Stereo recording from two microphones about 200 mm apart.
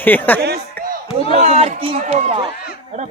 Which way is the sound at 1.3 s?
30° right (ahead or behind).